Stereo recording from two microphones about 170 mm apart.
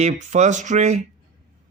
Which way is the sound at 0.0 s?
45° right (ahead or behind).